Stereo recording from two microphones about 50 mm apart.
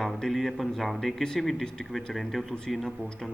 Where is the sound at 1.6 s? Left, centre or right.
Centre.